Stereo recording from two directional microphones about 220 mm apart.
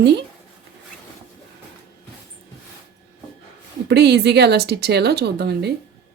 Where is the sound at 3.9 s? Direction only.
50° right (ahead or behind).